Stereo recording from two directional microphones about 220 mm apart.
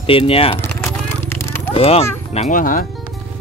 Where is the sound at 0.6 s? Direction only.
5° left (ahead or behind).